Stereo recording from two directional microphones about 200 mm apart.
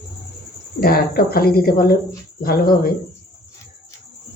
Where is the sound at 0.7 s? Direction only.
50° left (ahead or behind).